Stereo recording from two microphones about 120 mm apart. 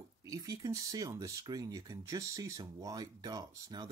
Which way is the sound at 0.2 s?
30° right (ahead or behind).